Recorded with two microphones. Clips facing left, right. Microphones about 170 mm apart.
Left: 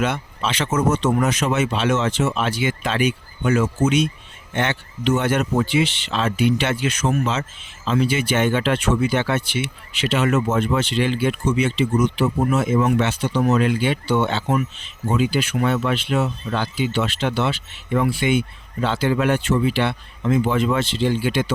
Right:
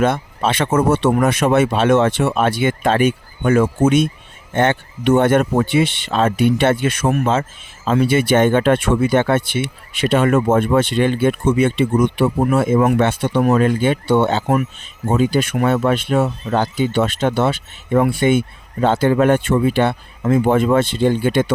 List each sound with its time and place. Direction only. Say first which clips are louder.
0.0 s speech: right 6 dB; 50° right (ahead or behind)